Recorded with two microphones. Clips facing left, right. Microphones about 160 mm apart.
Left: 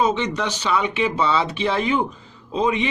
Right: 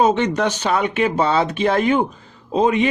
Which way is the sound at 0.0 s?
50° right (ahead or behind).